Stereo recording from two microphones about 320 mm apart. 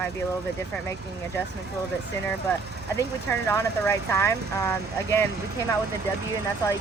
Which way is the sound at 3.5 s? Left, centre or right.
Centre.